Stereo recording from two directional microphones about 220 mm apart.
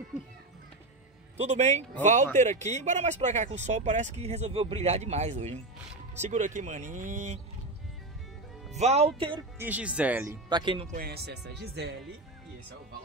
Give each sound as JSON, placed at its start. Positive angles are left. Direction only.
{"t": 1.4, "sound": "speech", "side_deg": -30}
{"t": 8.7, "sound": "speech", "side_deg": -30}
{"t": 9.6, "sound": "speech", "side_deg": -5}
{"t": 11.0, "sound": "speech", "side_deg": -45}